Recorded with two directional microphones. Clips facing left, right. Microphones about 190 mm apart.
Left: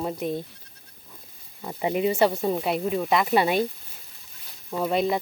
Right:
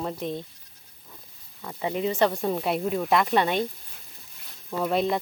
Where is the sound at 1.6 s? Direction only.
20° left (ahead or behind).